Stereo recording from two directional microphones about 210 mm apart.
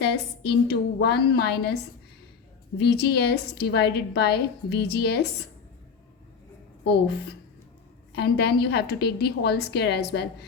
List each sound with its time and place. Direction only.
0.0 s a woman's voice: 50° left (ahead or behind)
8.1 s a woman's voice: 50° left (ahead or behind)